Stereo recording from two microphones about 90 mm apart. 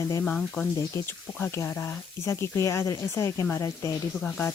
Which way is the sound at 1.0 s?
20° left (ahead or behind).